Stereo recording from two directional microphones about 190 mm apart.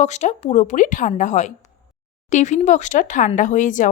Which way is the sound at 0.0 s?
40° left (ahead or behind).